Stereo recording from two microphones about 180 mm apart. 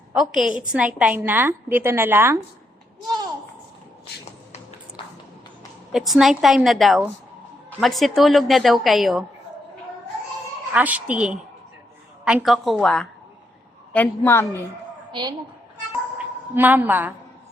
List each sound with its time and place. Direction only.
0.1 s a woman's voice: centre (ahead or behind)
5.0 s a sound: 30° left (ahead or behind)
5.9 s a woman's voice: centre (ahead or behind)
10.7 s a woman's voice: 10° right (ahead or behind); by 14.6 s 10° left (ahead or behind)
15.1 s a woman's voice: 25° right (ahead or behind)
16.1 s a woman's voice: 10° right (ahead or behind)